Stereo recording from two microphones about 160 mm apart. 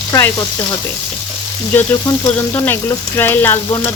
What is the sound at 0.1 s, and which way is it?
Frying, 20° left (ahead or behind).